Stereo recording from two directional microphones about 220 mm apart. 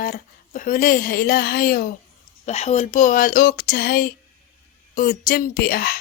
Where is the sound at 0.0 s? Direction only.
40° left (ahead or behind).